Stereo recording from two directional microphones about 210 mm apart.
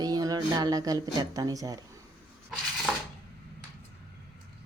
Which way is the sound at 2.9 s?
5° right (ahead or behind).